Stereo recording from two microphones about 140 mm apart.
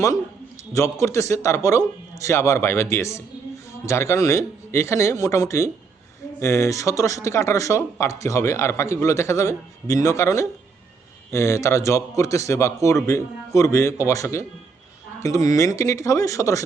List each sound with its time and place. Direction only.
0.7 s speech: 20° left (ahead or behind)